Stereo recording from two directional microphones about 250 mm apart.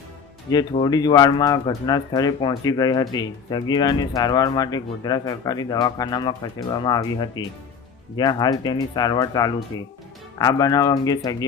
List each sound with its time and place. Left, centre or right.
0.5 s speech: centre